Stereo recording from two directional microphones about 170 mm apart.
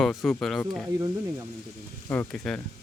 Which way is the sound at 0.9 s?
20° right (ahead or behind).